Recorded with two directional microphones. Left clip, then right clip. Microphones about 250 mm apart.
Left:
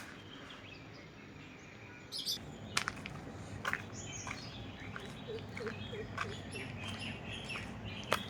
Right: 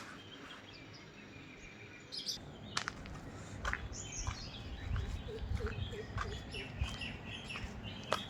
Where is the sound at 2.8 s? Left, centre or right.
Centre.